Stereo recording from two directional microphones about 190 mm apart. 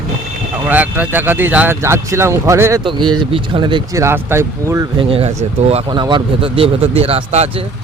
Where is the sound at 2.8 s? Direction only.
25° right (ahead or behind).